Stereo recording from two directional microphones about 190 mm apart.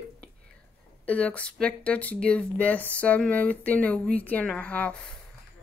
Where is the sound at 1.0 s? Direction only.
5° left (ahead or behind).